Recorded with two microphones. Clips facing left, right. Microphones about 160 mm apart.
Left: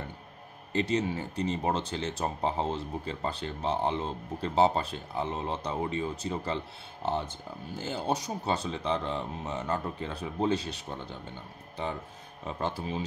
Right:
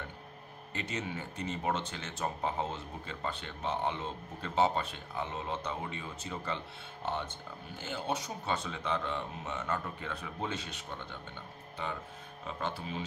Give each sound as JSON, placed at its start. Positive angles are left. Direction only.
{"t": 0.7, "sound": "speech", "side_deg": 35}